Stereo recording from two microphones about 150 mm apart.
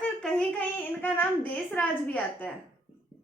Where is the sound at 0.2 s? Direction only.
5° left (ahead or behind).